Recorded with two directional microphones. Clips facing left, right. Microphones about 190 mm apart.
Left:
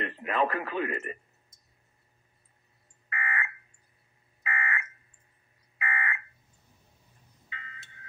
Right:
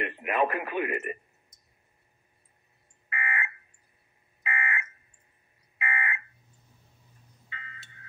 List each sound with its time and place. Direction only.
0.0 s speech: 15° right (ahead or behind)
3.1 s fire alarm: 20° right (ahead or behind)